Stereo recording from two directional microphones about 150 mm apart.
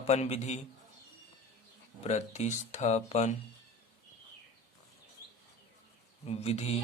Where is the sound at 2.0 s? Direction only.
50° left (ahead or behind).